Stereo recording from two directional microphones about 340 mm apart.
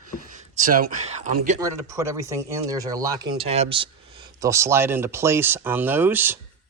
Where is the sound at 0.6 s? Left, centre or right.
Right.